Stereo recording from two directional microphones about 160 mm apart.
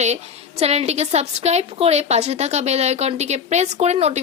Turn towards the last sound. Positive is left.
turn(degrees=-45)  # may be behind; listen again after turning